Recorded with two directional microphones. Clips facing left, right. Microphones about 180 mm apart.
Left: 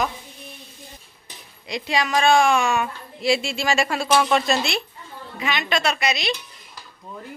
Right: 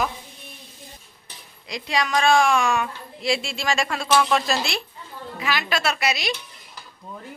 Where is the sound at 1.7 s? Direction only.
Centre (ahead or behind).